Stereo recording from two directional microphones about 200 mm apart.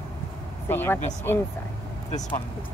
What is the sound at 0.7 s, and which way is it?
Speech, 10° left (ahead or behind).